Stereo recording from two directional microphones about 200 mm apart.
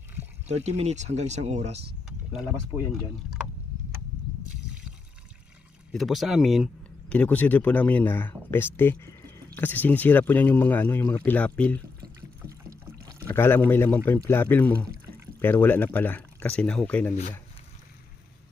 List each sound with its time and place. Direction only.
0.4 s speech: 35° right (ahead or behind)
2.0 s speech: centre (ahead or behind)
5.9 s speech: centre (ahead or behind)
13.2 s speech: 10° left (ahead or behind)